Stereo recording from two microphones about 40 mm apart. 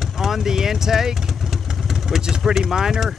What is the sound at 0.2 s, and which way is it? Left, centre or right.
Vehicle, centre.